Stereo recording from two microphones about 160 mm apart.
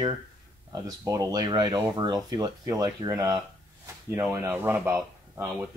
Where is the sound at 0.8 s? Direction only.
20° right (ahead or behind).